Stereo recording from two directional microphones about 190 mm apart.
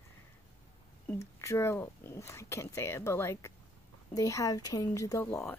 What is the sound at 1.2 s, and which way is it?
Speech, 15° left (ahead or behind).